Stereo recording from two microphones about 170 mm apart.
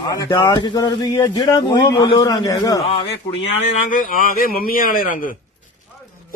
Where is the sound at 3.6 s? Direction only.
45° left (ahead or behind).